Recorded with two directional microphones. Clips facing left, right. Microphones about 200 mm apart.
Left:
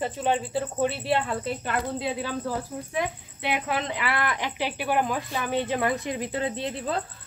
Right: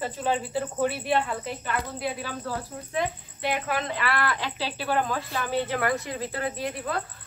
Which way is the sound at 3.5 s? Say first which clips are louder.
Left 2 dB; 20° left (ahead or behind).